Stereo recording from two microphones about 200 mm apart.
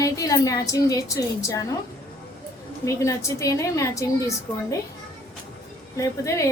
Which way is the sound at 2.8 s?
15° left (ahead or behind).